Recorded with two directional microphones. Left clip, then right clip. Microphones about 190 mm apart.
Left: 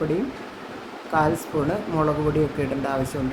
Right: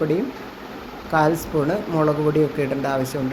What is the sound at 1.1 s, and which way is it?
Speech, centre (ahead or behind).